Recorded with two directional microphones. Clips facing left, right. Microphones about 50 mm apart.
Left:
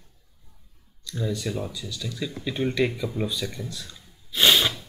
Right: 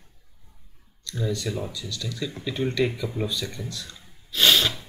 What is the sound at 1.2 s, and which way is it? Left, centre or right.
Speech, centre.